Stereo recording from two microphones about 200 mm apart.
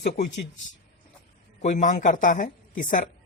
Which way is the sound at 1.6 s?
40° left (ahead or behind).